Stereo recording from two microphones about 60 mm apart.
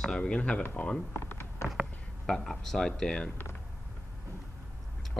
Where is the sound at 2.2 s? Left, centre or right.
Centre.